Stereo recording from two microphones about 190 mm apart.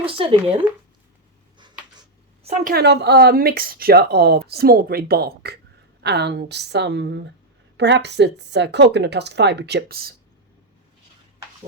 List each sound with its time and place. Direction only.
0.0 s a sound: 30° right (ahead or behind)
2.4 s a woman's voice: 35° right (ahead or behind)
2.7 s speech: 60° right (ahead or behind)